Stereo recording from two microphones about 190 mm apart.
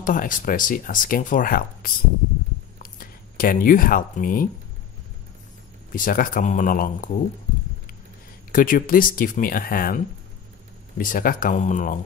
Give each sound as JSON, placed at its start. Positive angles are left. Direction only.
{"t": 0.0, "sound": "speech", "side_deg": 45}
{"t": 5.9, "sound": "speech", "side_deg": 45}
{"t": 8.5, "sound": "speech", "side_deg": 45}